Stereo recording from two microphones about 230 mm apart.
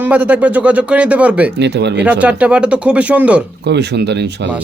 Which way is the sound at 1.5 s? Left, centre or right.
Right.